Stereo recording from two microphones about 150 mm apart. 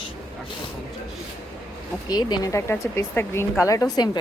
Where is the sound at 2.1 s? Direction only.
30° left (ahead or behind).